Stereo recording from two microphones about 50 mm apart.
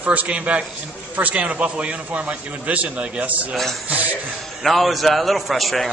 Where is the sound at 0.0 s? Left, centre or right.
Right.